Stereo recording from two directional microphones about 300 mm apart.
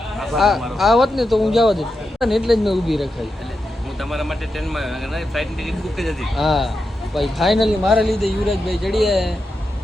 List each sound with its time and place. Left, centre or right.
0.2 s a man's voice: centre
4.1 s a man's voice: centre